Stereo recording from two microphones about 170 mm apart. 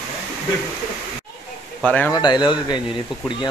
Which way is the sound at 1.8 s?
10° left (ahead or behind).